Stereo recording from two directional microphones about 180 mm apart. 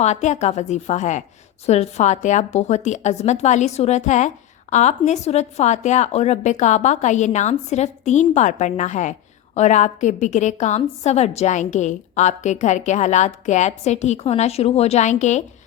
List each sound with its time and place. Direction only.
0.0 s a woman's voice: 40° left (ahead or behind)